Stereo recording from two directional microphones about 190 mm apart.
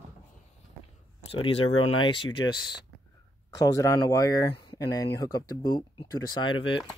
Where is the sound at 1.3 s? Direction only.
30° left (ahead or behind).